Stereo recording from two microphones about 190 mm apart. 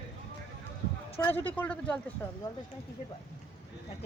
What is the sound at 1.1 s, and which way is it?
Speech, 10° left (ahead or behind).